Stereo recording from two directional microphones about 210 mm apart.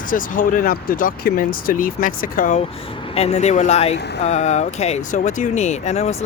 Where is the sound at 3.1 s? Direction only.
30° left (ahead or behind).